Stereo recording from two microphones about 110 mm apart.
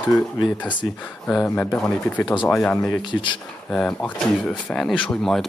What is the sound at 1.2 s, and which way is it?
Speech, 10° left (ahead or behind).